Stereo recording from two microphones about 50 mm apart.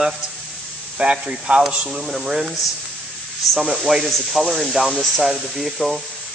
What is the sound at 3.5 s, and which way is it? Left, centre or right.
Speech, centre.